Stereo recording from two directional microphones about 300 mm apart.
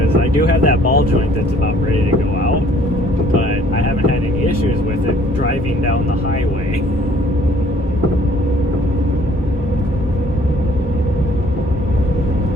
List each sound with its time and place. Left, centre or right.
0.4 s speech: left